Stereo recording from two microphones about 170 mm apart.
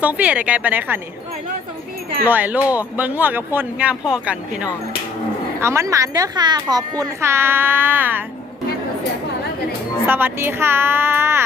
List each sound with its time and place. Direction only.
0.0 s a woman's voice: 10° right (ahead or behind)
2.2 s a woman's voice: 10° right (ahead or behind)
5.5 s a woman's voice: 15° right (ahead or behind)
10.1 s a woman's voice: 10° right (ahead or behind)